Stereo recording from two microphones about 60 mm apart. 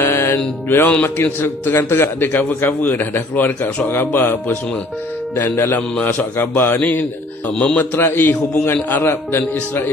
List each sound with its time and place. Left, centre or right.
0.0 s music: left
0.7 s a man's voice: left
7.5 s a man's voice: centre
7.8 s a man's voice: left